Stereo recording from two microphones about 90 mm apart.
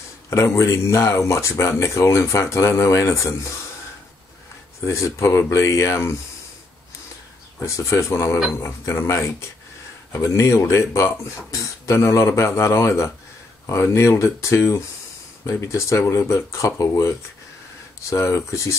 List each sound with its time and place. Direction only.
0.3 s speech: 35° left (ahead or behind)
4.8 s speech: 35° left (ahead or behind)
7.6 s speech: 35° left (ahead or behind)
18.1 s speech: 35° left (ahead or behind)